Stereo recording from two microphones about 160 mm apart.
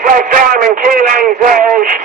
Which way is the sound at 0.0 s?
60° right (ahead or behind).